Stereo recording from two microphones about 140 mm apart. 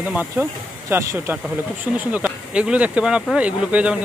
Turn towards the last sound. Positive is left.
turn(degrees=-10)  # may be behind; listen again after turning